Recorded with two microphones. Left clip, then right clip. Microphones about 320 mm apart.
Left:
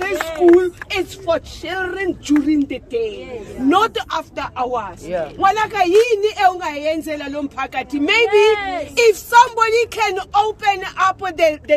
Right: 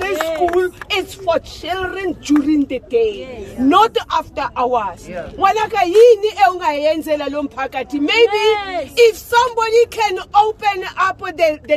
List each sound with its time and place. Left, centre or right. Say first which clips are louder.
0.2 s a sound: right 1 dB; right
0.6 s a woman's voice: right 1 dB; centre
8.3 s speech: left 2 dB; right
8.9 s a woman's voice: left 1 dB; centre